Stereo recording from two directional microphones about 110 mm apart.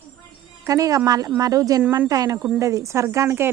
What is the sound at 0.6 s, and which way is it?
Speech, 30° right (ahead or behind).